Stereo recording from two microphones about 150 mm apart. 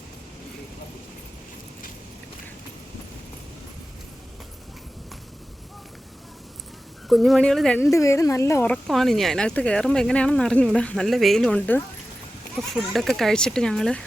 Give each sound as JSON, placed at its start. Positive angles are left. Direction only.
{"t": 7.1, "sound": "speech", "side_deg": 0}
{"t": 7.8, "sound": "a woman's voice", "side_deg": 20}
{"t": 8.7, "sound": "speech", "side_deg": 0}